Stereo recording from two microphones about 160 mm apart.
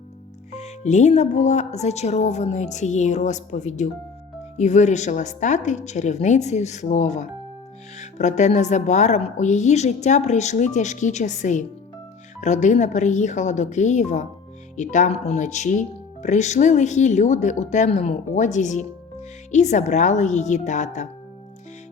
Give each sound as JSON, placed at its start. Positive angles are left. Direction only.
{"t": 0.5, "sound": "speech", "side_deg": 45}